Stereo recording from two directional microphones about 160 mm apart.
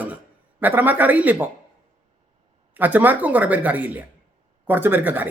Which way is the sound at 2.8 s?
10° right (ahead or behind).